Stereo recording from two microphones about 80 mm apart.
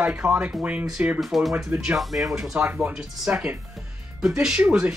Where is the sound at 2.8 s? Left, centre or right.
Centre.